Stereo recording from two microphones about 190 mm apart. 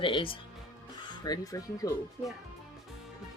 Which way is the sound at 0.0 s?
25° left (ahead or behind).